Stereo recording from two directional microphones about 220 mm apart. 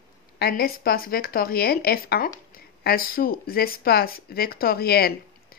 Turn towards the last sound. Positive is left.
turn(degrees=45)  # may be behind; listen again after turning